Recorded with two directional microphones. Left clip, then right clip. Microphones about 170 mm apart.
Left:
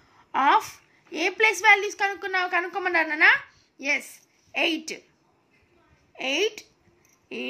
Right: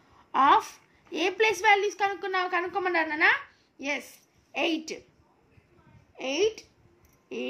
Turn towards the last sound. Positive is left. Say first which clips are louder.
# left 1 dB
turn(degrees=20)  # may be behind; listen again after turning